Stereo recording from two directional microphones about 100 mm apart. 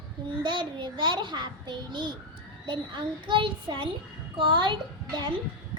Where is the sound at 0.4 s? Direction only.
50° right (ahead or behind).